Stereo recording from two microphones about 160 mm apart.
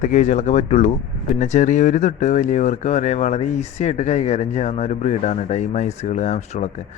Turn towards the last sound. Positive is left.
turn(degrees=45)  # may be behind; listen again after turning